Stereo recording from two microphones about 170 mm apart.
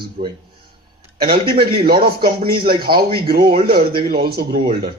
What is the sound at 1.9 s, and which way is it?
Speech, 65° right (ahead or behind).